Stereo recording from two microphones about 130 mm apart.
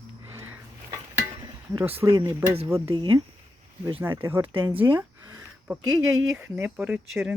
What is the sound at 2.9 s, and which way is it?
Speech, 35° right (ahead or behind).